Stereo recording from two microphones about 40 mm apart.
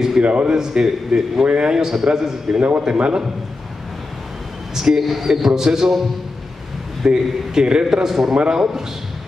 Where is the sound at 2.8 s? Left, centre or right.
Right.